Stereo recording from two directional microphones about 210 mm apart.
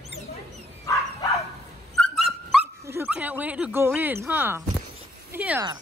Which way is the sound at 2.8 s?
10° right (ahead or behind).